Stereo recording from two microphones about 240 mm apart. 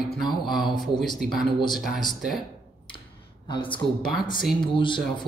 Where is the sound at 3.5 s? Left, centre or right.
Left.